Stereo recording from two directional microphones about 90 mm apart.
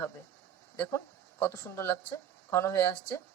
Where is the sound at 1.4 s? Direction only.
25° left (ahead or behind).